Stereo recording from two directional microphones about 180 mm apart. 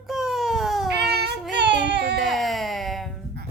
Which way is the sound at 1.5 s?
75° right (ahead or behind).